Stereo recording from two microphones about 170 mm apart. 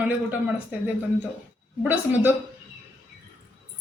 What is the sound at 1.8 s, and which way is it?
Speech, 10° right (ahead or behind).